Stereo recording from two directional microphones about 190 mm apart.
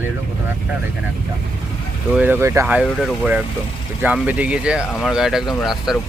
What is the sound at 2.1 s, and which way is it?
Speech, 10° right (ahead or behind).